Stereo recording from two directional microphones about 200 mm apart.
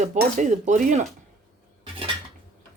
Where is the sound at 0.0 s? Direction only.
40° right (ahead or behind).